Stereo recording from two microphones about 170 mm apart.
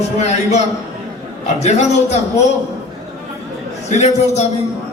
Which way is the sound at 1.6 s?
40° left (ahead or behind).